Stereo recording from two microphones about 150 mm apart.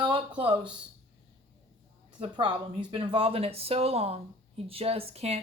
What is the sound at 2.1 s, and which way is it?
Speech, 30° right (ahead or behind).